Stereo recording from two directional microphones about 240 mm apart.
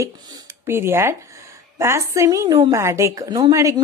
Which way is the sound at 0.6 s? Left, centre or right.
Centre.